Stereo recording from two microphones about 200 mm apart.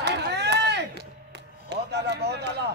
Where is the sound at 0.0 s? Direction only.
55° right (ahead or behind).